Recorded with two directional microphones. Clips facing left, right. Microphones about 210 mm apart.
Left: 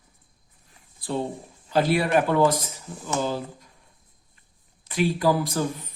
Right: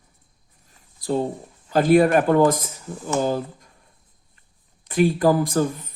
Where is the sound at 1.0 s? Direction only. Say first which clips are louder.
Right 5 dB; 40° right (ahead or behind).